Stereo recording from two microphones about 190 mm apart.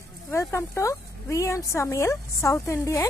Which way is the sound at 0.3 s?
15° left (ahead or behind).